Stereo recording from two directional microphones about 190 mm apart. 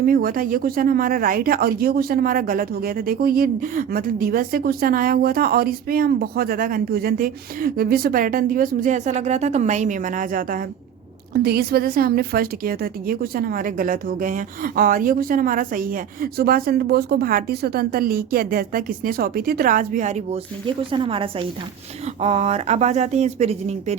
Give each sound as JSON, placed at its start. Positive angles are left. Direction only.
{"t": 0.0, "sound": "speech", "side_deg": -50}